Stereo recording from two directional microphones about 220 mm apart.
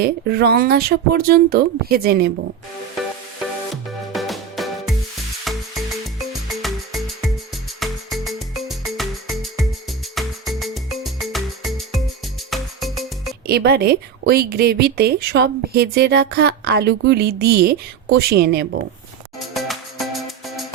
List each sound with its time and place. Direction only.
0.0 s speech: 45° right (ahead or behind)
4.1 s music: centre (ahead or behind)
13.5 s speech: 45° right (ahead or behind)
19.5 s music: centre (ahead or behind)